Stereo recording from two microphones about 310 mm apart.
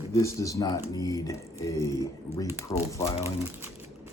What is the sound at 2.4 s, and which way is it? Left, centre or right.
Speech, centre.